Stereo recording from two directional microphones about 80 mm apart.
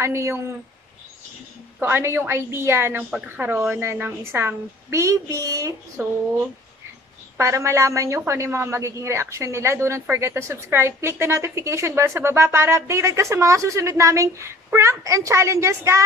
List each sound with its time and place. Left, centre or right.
0.0 s a woman's voice: right
1.8 s a woman's voice: right
3.7 s a woman's voice: right
7.3 s a woman's voice: right